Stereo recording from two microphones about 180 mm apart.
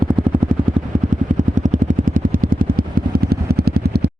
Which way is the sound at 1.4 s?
45° right (ahead or behind).